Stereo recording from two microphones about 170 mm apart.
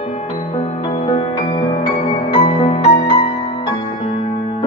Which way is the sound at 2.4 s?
35° left (ahead or behind).